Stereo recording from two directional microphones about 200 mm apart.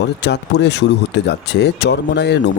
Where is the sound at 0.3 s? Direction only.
60° left (ahead or behind).